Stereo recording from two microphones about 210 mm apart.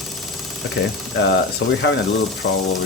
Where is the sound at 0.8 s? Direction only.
55° left (ahead or behind).